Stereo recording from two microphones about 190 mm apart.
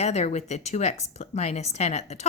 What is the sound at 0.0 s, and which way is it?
A woman's voice, 35° left (ahead or behind).